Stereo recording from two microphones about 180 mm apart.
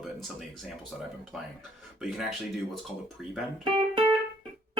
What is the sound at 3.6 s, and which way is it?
Music, 30° right (ahead or behind).